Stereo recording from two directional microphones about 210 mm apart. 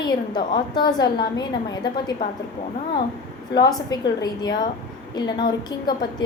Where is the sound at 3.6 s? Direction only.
20° left (ahead or behind).